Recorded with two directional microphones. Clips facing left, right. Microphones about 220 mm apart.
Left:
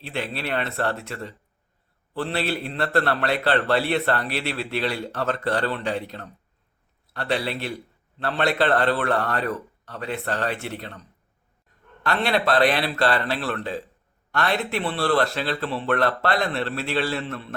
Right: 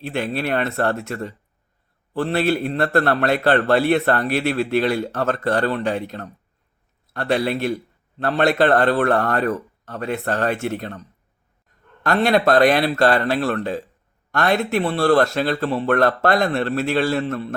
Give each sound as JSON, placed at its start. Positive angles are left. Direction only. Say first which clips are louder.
{"t": 0.0, "sound": "a man's voice", "louder": "right 6 dB", "side_deg": -50}
{"t": 12.0, "sound": "a man's voice", "louder": "right 6 dB", "side_deg": -45}